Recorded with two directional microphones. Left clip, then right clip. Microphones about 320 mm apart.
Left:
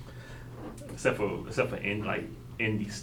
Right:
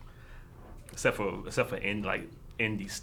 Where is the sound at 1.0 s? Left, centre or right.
Right.